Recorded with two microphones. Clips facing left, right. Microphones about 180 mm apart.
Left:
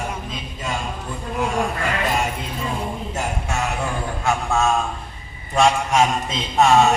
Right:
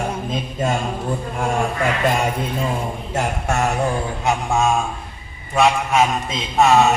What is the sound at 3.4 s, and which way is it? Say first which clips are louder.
Music: right 5 dB; 55° right (ahead or behind).